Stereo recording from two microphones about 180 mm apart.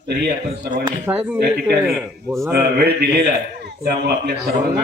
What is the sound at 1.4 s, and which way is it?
A man's voice, 65° right (ahead or behind).